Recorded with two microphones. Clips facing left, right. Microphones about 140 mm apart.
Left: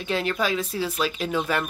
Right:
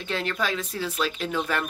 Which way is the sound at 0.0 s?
10° left (ahead or behind).